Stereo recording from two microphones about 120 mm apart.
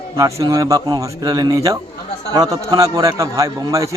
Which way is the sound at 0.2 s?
30° right (ahead or behind).